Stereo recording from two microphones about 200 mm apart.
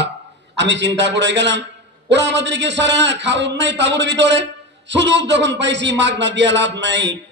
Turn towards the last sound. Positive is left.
turn(degrees=-60)  # may be behind; listen again after turning